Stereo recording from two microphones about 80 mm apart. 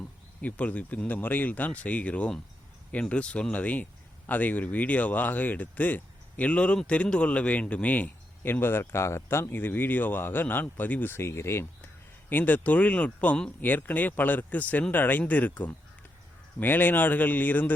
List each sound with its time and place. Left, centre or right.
0.4 s speech: centre; by 11.9 s left
12.3 s speech: left